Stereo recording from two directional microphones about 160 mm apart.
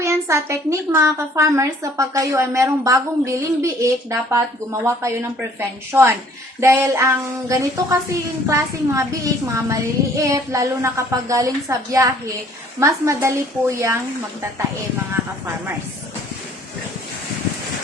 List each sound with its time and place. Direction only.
0.0 s a woman's voice: 15° right (ahead or behind)